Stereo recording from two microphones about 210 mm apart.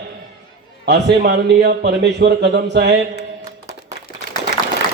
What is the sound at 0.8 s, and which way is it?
A man's voice, 50° right (ahead or behind).